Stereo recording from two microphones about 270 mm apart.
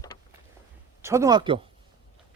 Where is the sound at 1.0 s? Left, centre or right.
Centre.